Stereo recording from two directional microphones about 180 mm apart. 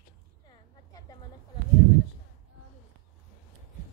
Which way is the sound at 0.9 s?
20° left (ahead or behind).